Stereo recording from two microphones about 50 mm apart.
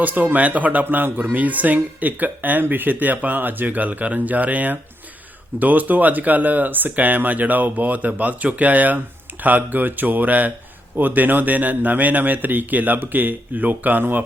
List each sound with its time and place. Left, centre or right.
0.0 s speech: right